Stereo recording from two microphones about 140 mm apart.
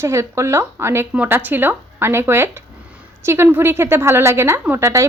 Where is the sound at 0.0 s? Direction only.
20° right (ahead or behind).